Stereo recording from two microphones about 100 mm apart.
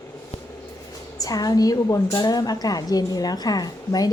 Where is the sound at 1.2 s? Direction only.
40° left (ahead or behind).